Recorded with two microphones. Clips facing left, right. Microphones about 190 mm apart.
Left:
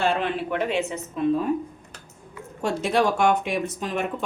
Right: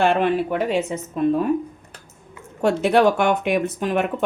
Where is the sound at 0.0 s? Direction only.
55° right (ahead or behind).